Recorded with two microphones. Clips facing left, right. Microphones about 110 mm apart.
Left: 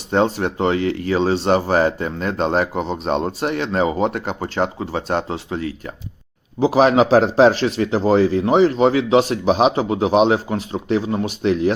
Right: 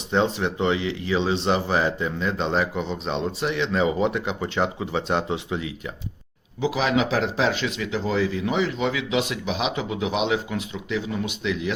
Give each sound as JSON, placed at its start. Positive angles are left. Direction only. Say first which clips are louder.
{"t": 0.1, "sound": "speech", "louder": "left 4 dB", "side_deg": 45}